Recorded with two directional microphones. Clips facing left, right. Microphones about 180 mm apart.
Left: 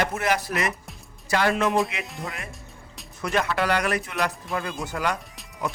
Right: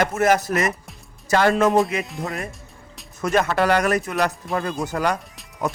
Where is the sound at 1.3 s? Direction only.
45° right (ahead or behind).